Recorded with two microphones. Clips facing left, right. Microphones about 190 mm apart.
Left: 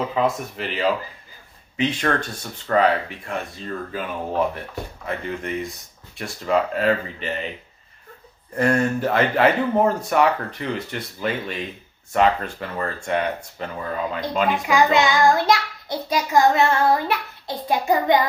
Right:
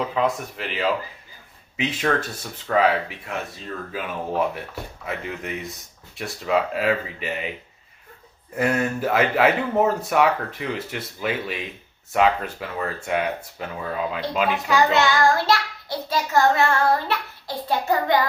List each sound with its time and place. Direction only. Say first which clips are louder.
0.2 s a man's voice: left 2 dB; centre (ahead or behind)
4.5 s a man's voice: left 1 dB; 5° right (ahead or behind)
8.5 s a man's voice: left 3 dB; 5° right (ahead or behind)
14.7 s child singing: left 1 dB; 15° left (ahead or behind)